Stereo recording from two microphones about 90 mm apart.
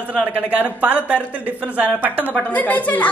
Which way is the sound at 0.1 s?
10° right (ahead or behind).